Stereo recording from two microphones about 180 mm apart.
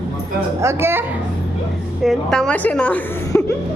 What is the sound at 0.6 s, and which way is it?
Speech, 15° right (ahead or behind).